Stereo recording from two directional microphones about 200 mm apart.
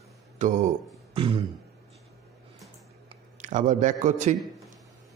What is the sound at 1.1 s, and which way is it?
Beatboxing, 25° right (ahead or behind).